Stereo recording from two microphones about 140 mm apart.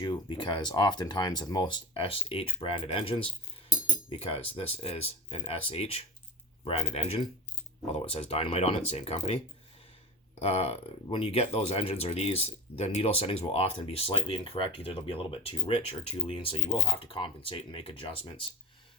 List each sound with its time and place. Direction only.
0.0 s speech: 35° left (ahead or behind)
10.4 s speech: 45° left (ahead or behind)